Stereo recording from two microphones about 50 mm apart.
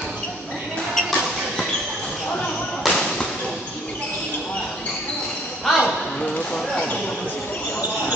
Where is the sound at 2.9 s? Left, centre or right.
Centre.